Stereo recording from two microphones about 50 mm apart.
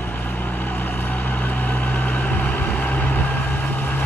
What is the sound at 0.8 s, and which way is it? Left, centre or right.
Vehicle, left.